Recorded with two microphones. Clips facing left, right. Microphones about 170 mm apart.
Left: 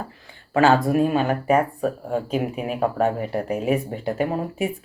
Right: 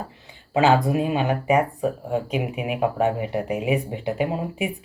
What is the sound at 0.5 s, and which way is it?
Speech, 15° right (ahead or behind).